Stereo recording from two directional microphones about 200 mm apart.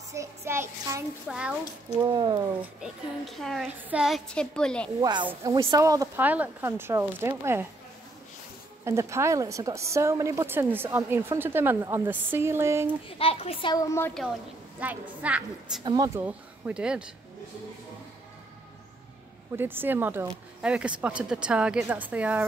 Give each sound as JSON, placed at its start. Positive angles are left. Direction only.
{"t": 0.1, "sound": "a woman's voice", "side_deg": -15}
{"t": 2.0, "sound": "speech", "side_deg": -20}
{"t": 2.6, "sound": "a woman's voice", "side_deg": 0}
{"t": 5.0, "sound": "a woman's voice", "side_deg": -20}
{"t": 8.8, "sound": "a woman's voice", "side_deg": -15}
{"t": 13.2, "sound": "a child's voice", "side_deg": 30}
{"t": 14.8, "sound": "a woman's voice", "side_deg": -5}
{"t": 15.8, "sound": "a woman's voice", "side_deg": -20}
{"t": 19.5, "sound": "a woman's voice", "side_deg": -10}